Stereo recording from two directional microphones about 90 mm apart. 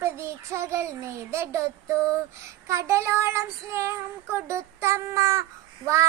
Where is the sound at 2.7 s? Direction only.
35° right (ahead or behind).